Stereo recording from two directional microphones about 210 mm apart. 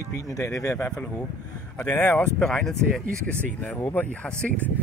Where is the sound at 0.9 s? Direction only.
5° left (ahead or behind).